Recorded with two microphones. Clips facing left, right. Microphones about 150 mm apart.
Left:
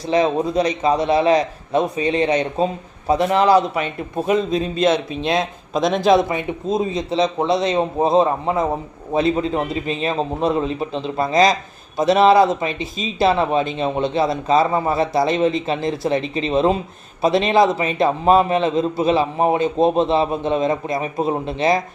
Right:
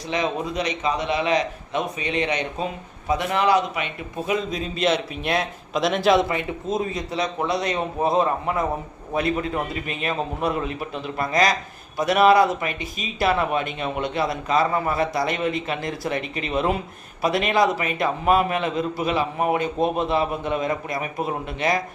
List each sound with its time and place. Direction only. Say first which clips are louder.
0.1 s a man's voice: left 8 dB; 35° left (ahead or behind)